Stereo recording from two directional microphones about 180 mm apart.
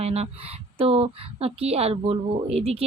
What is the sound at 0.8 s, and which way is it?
Speech, 35° right (ahead or behind).